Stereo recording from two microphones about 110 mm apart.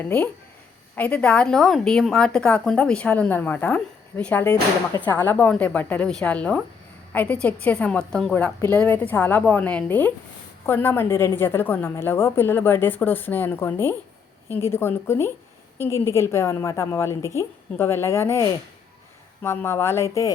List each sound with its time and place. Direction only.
0.0 s a woman's voice: 10° left (ahead or behind); by 20.3 s 25° left (ahead or behind)